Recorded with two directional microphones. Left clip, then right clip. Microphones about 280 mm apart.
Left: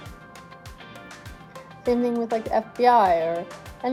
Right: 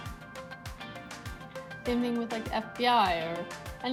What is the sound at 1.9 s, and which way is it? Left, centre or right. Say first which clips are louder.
Speech: left 9 dB; right.